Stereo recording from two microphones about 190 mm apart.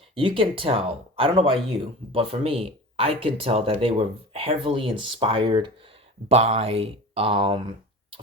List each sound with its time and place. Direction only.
0.1 s speech: 30° right (ahead or behind)